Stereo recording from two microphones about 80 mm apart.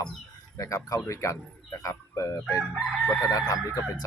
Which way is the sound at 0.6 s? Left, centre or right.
Left.